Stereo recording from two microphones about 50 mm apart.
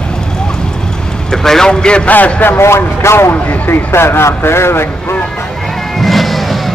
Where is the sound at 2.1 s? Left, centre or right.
Left.